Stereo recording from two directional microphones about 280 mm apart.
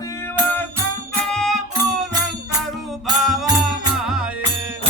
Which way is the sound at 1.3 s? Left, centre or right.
Centre.